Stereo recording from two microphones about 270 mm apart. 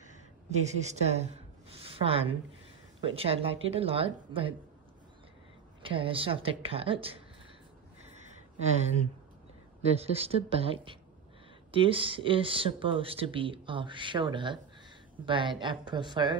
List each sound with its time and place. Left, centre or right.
0.6 s a woman's voice: right
5.8 s speech: centre
9.9 s speech: right